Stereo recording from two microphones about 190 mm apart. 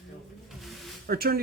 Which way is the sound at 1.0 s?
50° right (ahead or behind).